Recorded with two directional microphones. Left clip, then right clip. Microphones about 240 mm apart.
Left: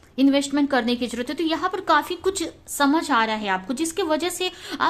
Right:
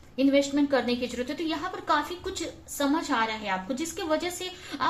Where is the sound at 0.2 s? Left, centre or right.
Left.